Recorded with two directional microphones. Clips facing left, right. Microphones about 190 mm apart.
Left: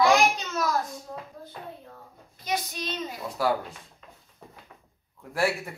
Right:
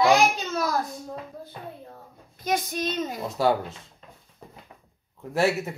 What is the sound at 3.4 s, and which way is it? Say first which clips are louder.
Speech: right 4 dB; 25° right (ahead or behind).